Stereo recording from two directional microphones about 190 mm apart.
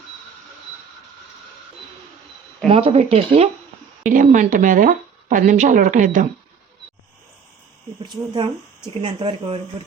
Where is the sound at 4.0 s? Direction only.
45° right (ahead or behind).